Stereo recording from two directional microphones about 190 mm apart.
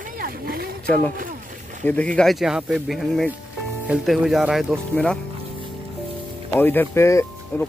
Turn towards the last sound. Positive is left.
turn(degrees=15)  # may be behind; listen again after turning